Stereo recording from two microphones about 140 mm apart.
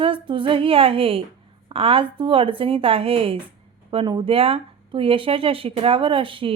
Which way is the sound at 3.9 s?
35° right (ahead or behind).